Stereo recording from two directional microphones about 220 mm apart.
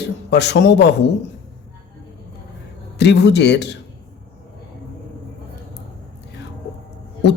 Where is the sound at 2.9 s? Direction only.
50° left (ahead or behind).